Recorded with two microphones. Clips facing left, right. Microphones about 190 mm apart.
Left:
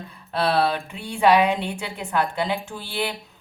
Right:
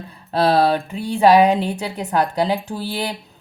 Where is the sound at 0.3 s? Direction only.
35° right (ahead or behind).